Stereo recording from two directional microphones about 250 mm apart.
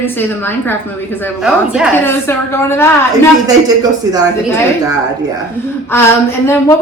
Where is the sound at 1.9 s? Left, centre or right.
Centre.